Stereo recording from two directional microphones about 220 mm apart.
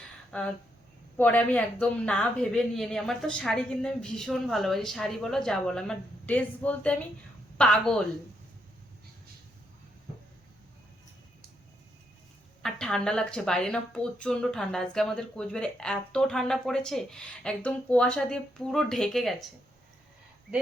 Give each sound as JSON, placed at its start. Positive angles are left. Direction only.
{"t": 0.3, "sound": "speech", "side_deg": 5}
{"t": 12.6, "sound": "speech", "side_deg": 5}